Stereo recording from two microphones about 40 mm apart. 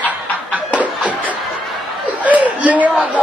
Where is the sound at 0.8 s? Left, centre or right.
Right.